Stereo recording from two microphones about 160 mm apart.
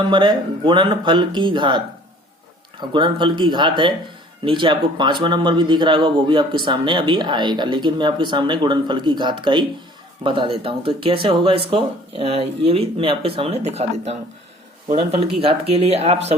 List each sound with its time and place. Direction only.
0.1 s a man's voice: 30° right (ahead or behind)
2.8 s a man's voice: 30° right (ahead or behind)
15.4 s speech: 40° right (ahead or behind)